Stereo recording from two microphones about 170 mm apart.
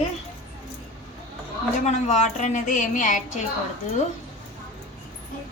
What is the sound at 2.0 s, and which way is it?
A woman's voice, 45° left (ahead or behind).